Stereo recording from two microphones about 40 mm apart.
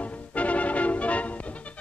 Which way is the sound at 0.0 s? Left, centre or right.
Left.